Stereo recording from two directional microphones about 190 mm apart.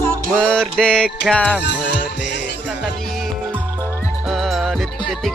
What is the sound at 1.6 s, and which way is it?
Music, 65° left (ahead or behind).